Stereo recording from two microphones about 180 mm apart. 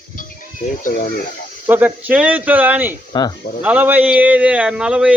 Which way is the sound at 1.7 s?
10° right (ahead or behind).